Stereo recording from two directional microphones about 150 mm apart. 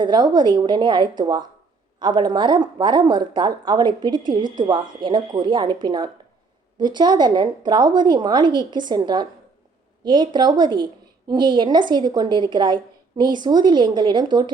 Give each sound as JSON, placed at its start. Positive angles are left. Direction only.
{"t": 0.0, "sound": "a woman's voice", "side_deg": -30}